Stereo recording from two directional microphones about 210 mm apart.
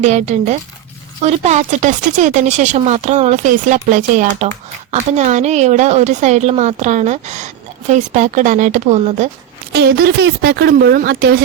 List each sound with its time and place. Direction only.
0.0 s a woman's voice: 35° right (ahead or behind)
9.7 s speech: 50° right (ahead or behind)